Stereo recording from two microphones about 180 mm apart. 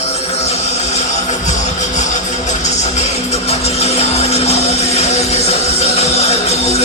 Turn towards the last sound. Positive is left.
turn(degrees=35)  # may be behind; listen again after turning